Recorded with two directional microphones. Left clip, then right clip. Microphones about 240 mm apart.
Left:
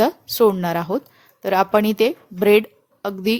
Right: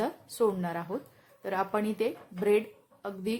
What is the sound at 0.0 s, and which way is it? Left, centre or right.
A woman's voice, left.